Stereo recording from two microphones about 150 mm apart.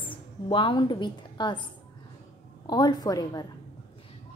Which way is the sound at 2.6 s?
30° left (ahead or behind).